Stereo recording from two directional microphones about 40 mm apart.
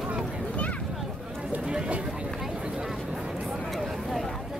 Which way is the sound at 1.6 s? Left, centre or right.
Right.